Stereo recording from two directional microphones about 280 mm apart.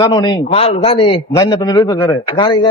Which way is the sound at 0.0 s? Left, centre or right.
Centre.